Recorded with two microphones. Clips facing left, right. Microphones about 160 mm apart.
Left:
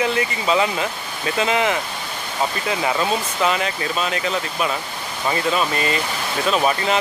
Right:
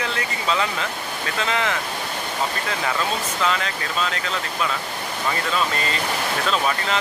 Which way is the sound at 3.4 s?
15° left (ahead or behind).